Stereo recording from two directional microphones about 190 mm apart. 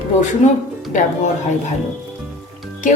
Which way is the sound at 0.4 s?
40° left (ahead or behind).